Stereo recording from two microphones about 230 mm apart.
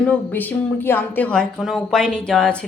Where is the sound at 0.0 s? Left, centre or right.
Centre.